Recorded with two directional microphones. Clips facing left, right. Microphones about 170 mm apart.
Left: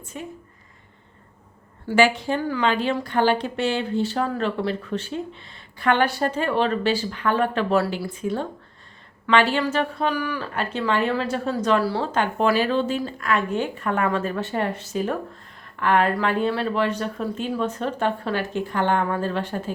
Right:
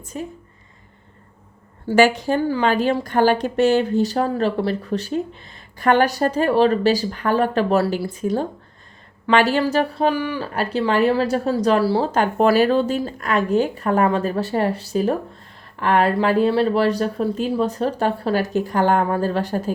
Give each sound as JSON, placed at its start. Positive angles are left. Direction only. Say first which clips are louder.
{"t": 0.0, "sound": "speech", "louder": "right 5 dB", "side_deg": -40}
{"t": 2.0, "sound": "a woman's voice", "louder": "right 4 dB", "side_deg": -45}